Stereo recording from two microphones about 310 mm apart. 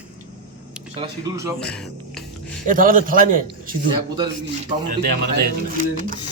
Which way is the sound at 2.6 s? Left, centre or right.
Right.